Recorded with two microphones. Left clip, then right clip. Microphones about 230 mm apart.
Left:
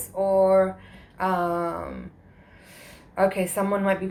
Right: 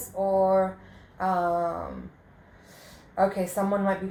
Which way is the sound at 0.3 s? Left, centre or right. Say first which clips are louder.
Left 3 dB; left.